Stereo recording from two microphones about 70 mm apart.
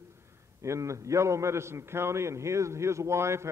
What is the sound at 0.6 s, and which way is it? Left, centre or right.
A man's voice, right.